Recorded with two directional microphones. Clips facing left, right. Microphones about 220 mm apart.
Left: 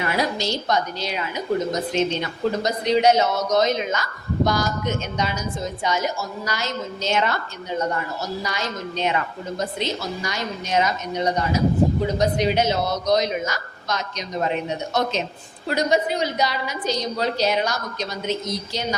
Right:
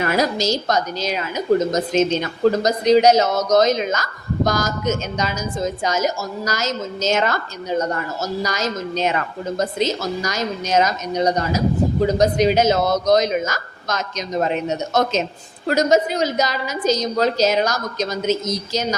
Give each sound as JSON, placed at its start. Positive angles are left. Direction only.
{"t": 0.0, "sound": "a woman's voice", "side_deg": -45}